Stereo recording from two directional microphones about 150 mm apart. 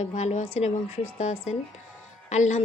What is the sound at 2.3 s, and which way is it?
Speech, 50° left (ahead or behind).